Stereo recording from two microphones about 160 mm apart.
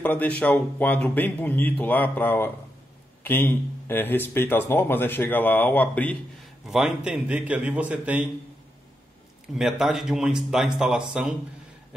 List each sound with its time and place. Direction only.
0.0 s speech: 10° left (ahead or behind)
6.6 s a man's voice: 5° right (ahead or behind)
9.6 s speech: 5° right (ahead or behind)